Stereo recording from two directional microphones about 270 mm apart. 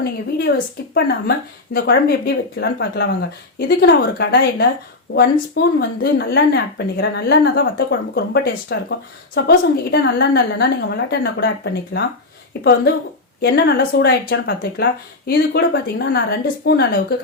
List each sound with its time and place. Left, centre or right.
0.0 s speech: left
13.4 s speech: left